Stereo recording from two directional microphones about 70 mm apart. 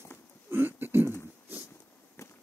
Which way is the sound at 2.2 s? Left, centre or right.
Left.